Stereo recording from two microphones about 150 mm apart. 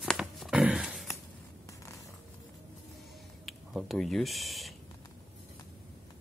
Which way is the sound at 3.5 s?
Centre (ahead or behind).